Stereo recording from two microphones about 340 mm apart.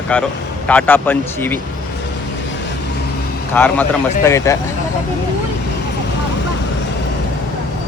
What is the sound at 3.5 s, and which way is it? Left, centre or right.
Speech, centre.